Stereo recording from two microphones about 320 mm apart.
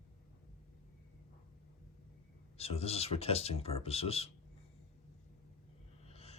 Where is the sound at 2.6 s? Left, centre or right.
Centre.